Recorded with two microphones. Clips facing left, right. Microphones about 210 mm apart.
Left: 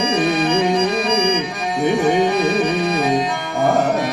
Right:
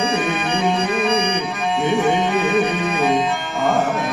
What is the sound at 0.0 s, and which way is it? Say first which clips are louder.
Music: left 3 dB; 35° left (ahead or behind).